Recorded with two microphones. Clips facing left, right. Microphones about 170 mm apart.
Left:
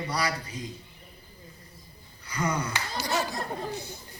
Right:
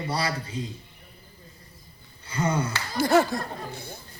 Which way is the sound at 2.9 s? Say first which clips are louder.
Right 11 dB; 55° right (ahead or behind).